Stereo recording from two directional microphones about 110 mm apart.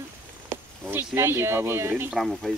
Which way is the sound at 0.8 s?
20° right (ahead or behind).